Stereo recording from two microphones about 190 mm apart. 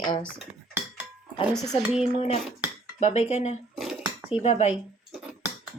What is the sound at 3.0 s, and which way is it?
Speech, 35° left (ahead or behind).